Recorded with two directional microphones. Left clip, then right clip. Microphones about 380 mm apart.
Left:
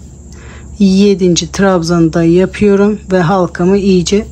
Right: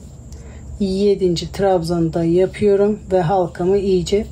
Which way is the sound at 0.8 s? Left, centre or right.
Left.